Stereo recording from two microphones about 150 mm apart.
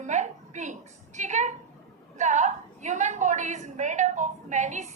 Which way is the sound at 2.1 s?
55° right (ahead or behind).